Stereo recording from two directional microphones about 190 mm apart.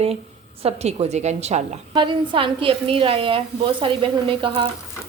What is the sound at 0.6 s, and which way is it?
A woman's voice, 35° right (ahead or behind).